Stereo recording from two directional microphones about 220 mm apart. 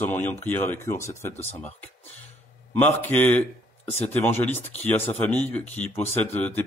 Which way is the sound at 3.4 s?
10° left (ahead or behind).